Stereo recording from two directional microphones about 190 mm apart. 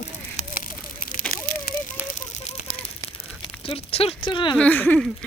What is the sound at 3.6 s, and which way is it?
Speech, 30° left (ahead or behind).